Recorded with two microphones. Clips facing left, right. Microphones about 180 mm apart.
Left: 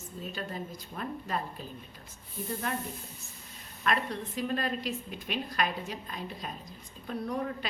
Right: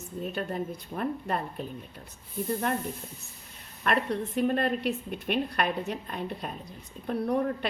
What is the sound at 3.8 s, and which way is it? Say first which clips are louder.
A woman's voice: right 4 dB; 60° right (ahead or behind).